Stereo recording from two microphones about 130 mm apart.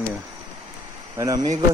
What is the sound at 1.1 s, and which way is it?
Speech, 30° right (ahead or behind).